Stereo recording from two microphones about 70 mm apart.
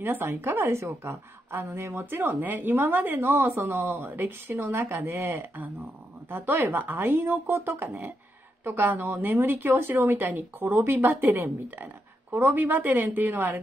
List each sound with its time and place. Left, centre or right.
0.0 s a woman's voice: right